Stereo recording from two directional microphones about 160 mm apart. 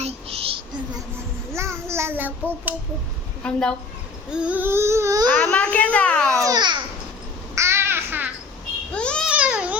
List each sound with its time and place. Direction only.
0.0 s child singing: 40° right (ahead or behind)
1.5 s babbling: 15° right (ahead or behind)
3.4 s a woman's voice: 5° left (ahead or behind)
4.3 s a sound: 5° right (ahead or behind)
5.4 s a child's voice: 10° left (ahead or behind)
6.4 s a child's voice: 25° right (ahead or behind)
7.5 s babbling: 15° right (ahead or behind)
8.9 s babbling: 5° left (ahead or behind)
9.3 s babbling: 5° right (ahead or behind)